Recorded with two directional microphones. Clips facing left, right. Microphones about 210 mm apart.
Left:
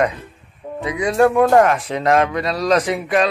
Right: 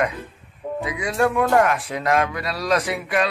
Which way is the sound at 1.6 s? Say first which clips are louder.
Left 4 dB; 25° left (ahead or behind).